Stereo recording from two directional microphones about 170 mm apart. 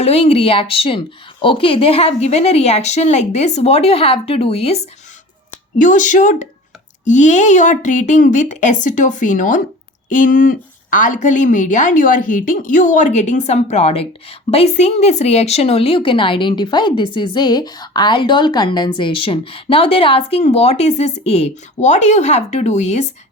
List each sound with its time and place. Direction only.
0.0 s a woman's voice: 35° left (ahead or behind)
5.8 s a woman's voice: 50° left (ahead or behind)